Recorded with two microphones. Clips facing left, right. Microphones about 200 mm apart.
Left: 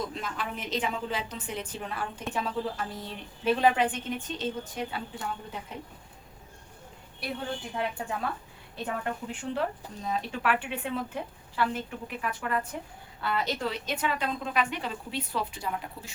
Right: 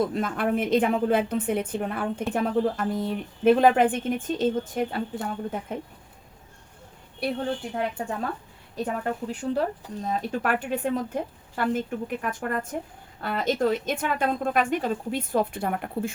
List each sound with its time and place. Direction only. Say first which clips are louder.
0.0 s a woman's voice: right 9 dB; 55° right (ahead or behind)
7.8 s speech: right 3 dB; 40° right (ahead or behind)